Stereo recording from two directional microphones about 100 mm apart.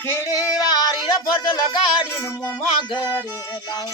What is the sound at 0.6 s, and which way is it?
Child singing, 40° left (ahead or behind).